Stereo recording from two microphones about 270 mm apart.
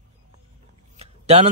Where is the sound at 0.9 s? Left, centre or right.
Right.